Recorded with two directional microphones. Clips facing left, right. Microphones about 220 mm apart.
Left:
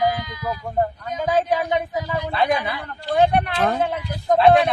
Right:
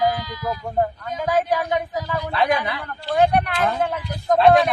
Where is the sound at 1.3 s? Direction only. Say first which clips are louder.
Left 1 dB; 20° left (ahead or behind).